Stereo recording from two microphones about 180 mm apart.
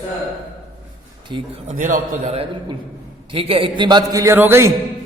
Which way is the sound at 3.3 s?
30° right (ahead or behind).